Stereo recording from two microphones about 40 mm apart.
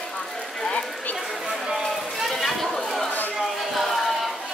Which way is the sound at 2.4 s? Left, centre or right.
Centre.